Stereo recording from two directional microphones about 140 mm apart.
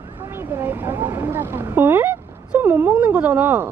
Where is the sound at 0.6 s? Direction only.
15° right (ahead or behind).